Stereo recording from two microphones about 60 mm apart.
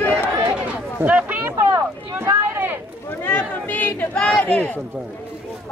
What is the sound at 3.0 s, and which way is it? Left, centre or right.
Speech, left.